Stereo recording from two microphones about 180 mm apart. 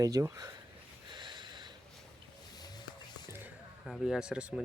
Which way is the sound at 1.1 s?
25° right (ahead or behind).